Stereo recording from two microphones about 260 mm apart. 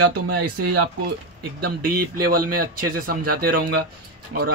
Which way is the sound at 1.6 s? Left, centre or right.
Right.